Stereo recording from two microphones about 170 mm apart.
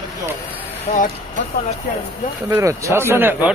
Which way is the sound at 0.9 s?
40° left (ahead or behind).